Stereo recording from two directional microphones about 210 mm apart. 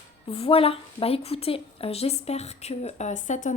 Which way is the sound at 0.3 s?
25° left (ahead or behind).